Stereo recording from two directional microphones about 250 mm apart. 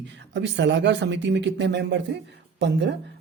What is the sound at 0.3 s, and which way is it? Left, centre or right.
Speech, right.